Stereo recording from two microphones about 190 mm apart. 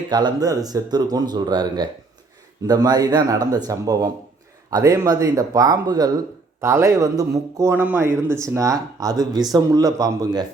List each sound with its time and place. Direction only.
0.1 s speech: 25° right (ahead or behind)